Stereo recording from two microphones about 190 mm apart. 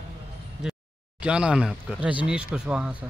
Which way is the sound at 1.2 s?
5° right (ahead or behind).